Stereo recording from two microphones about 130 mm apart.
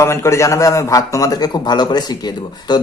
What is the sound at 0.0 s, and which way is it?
A man's voice, 20° left (ahead or behind).